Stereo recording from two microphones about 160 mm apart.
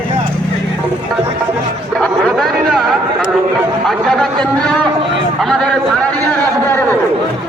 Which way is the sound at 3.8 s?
Centre (ahead or behind).